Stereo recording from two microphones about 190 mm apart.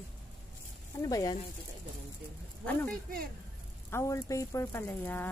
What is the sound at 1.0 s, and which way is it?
Speech, 20° left (ahead or behind).